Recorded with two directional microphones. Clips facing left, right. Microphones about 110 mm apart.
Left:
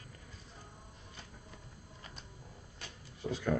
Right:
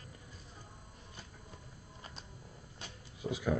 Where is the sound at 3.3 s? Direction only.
10° right (ahead or behind).